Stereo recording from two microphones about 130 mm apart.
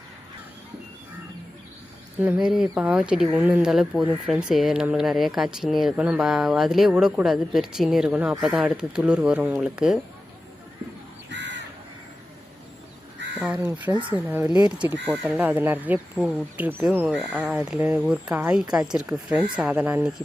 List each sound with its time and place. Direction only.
2.2 s speech: 10° right (ahead or behind)
13.6 s speech: 15° right (ahead or behind)